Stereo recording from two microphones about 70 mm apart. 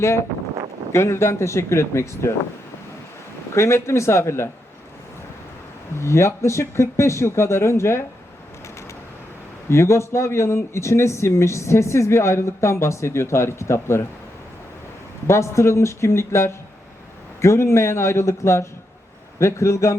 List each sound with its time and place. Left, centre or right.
0.0 s speech: left
3.5 s speech: left
6.0 s speech: left
9.6 s speech: left
15.3 s a man's voice: left